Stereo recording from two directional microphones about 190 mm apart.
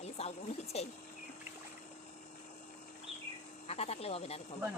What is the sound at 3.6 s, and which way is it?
Speech, 35° left (ahead or behind).